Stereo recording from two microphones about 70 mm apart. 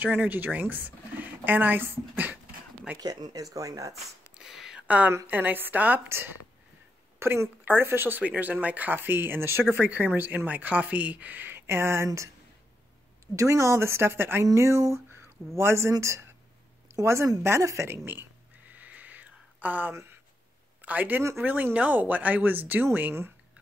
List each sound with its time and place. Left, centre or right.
0.0 s speech: right
3.0 s speech: right
3.5 s speech: right
4.4 s a sound: centre
4.8 s a woman's voice: right
6.0 s speech: right
8.2 s speech: right
13.4 s speech: right
14.4 s speech: right
18.7 s a sound: right
20.8 s speech: right